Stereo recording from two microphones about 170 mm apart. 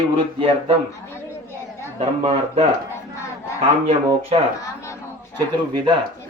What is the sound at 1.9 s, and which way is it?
Speech, 35° right (ahead or behind).